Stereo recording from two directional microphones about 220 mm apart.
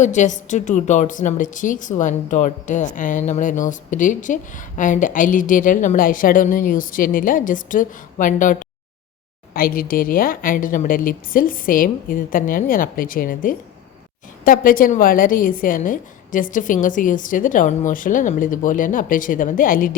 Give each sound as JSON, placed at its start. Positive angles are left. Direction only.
{"t": 0.0, "sound": "a woman's voice", "side_deg": 35}